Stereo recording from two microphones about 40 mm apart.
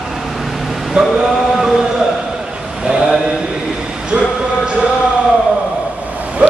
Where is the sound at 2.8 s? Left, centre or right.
Centre.